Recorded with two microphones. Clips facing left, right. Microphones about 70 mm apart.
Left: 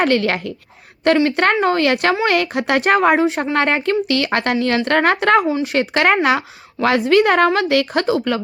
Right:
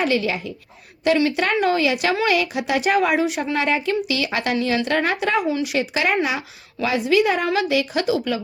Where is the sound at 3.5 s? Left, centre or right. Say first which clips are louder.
Left 4 dB; left.